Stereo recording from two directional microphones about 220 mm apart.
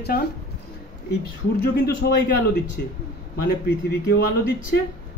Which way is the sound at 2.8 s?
45° left (ahead or behind).